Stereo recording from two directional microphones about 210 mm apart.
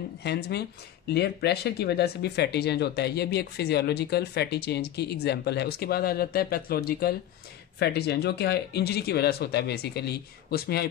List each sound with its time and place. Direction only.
0.2 s speech: 50° left (ahead or behind)